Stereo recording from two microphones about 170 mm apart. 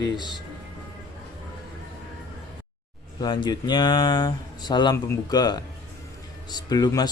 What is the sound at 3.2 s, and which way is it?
Speech, 25° left (ahead or behind).